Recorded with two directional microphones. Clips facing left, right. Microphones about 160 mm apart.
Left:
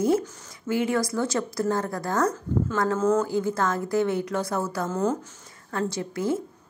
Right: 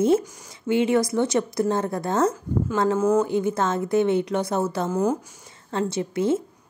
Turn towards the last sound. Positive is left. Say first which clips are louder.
# right 4 dB
turn(degrees=-25)  # may be behind; listen again after turning